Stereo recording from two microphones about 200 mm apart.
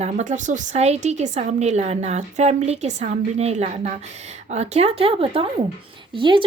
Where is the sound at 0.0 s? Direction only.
35° right (ahead or behind).